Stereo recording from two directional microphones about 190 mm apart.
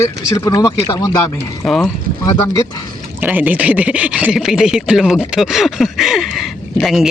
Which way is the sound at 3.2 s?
10° right (ahead or behind).